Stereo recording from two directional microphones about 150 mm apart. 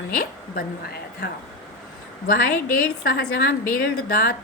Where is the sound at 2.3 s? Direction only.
85° left.